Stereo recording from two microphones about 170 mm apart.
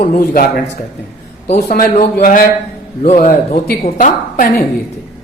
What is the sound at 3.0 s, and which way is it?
Speech, 40° left (ahead or behind).